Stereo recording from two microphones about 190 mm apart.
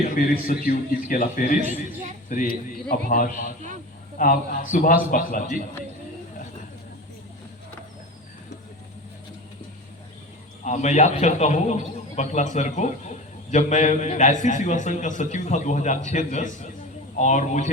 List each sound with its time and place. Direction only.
0.0 s a man's voice: 50° left (ahead or behind)
10.6 s a man's voice: 40° left (ahead or behind)